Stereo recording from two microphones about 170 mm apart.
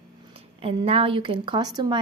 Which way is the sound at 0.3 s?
35° right (ahead or behind).